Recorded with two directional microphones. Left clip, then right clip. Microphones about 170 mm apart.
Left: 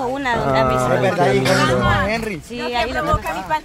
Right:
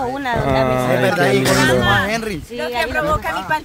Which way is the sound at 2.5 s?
25° left (ahead or behind).